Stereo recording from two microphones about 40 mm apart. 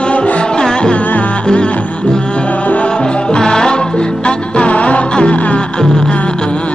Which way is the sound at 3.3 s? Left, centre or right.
Centre.